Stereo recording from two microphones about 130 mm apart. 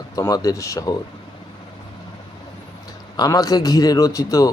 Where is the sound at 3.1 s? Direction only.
30° left (ahead or behind).